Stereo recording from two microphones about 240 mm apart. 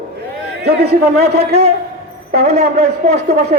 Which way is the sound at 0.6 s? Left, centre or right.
Right.